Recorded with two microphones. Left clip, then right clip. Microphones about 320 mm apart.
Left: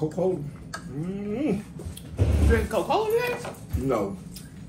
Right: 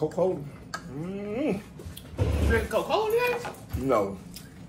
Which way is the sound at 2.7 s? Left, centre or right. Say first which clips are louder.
Left 1 dB; centre.